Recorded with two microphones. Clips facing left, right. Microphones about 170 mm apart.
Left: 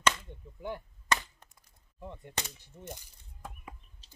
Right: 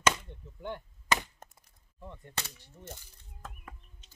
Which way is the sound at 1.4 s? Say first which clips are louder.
Right 8 dB; 45° right (ahead or behind).